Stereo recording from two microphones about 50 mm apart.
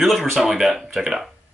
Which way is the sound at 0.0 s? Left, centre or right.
Centre.